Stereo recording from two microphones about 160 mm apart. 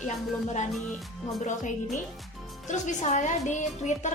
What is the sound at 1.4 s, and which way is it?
A woman's voice, 50° left (ahead or behind).